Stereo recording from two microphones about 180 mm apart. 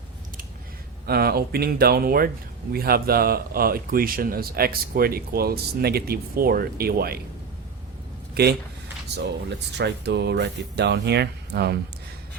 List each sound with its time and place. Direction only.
1.0 s a man's voice: 60° right (ahead or behind)
8.4 s a man's voice: 60° right (ahead or behind)
9.7 s speech: 70° right (ahead or behind)